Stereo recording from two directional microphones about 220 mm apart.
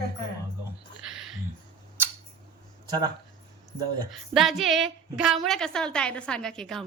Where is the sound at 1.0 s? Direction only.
Centre (ahead or behind).